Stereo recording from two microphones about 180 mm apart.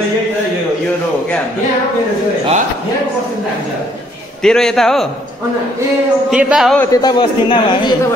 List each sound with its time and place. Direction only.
4.4 s a man's voice: 5° left (ahead or behind)
6.3 s a man's voice: 5° right (ahead or behind)
6.8 s a man's voice: 20° left (ahead or behind)